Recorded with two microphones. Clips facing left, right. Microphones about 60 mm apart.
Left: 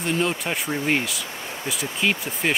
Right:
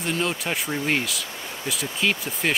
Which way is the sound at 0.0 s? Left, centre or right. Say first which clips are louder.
Left 2 dB; centre.